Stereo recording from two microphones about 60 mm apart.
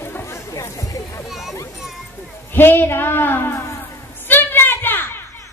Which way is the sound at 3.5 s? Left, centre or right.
Left.